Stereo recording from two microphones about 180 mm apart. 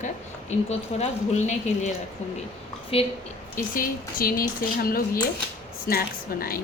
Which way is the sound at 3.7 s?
50° left (ahead or behind).